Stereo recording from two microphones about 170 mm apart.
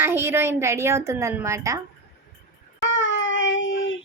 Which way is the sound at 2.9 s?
90° left.